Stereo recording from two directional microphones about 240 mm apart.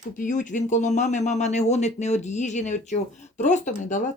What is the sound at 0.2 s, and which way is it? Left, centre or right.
Speech, left.